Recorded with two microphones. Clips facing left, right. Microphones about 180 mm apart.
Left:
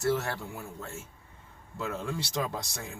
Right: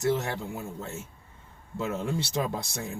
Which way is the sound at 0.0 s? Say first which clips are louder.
Right 2 dB; 20° right (ahead or behind).